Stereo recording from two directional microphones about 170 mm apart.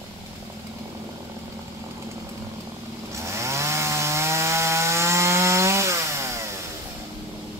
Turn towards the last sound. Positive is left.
turn(degrees=-15)  # may be behind; listen again after turning